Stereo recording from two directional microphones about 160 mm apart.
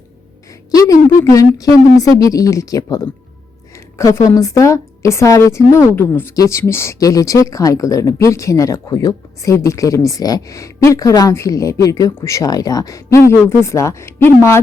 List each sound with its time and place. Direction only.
1.2 s a woman's voice: 20° left (ahead or behind)